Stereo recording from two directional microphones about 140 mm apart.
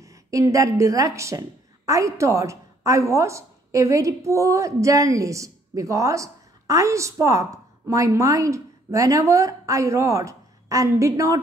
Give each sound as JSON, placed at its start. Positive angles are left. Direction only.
{"t": 0.0, "sound": "a woman's voice", "side_deg": -25}